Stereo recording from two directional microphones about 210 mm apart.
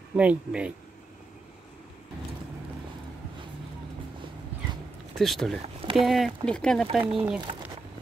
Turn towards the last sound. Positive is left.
turn(degrees=-5)  # may be behind; listen again after turning